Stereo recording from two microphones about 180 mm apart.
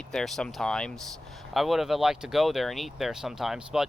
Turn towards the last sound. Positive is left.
turn(degrees=-5)  # may be behind; listen again after turning